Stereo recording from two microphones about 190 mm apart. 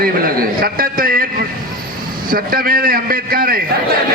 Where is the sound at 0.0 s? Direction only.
50° right (ahead or behind).